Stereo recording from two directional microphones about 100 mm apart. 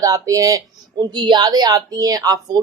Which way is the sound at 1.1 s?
45° right (ahead or behind).